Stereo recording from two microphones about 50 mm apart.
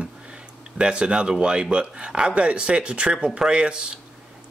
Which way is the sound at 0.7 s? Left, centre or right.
Centre.